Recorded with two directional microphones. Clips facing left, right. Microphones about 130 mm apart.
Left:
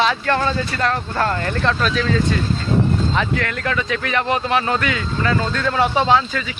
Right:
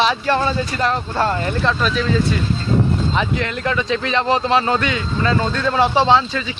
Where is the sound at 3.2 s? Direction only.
20° right (ahead or behind).